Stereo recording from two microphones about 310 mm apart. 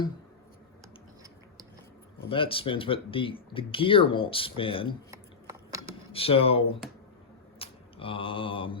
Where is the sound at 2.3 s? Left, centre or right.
Centre.